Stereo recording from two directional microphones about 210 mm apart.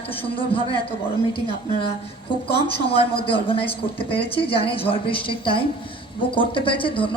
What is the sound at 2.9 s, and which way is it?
A woman's voice, 25° left (ahead or behind).